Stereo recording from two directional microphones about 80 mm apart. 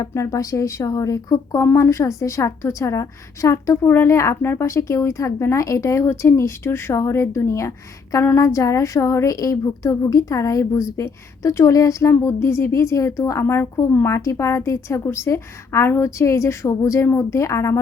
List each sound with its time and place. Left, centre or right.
0.0 s a woman's voice: left
13.4 s a woman's voice: left
14.1 s a woman's voice: left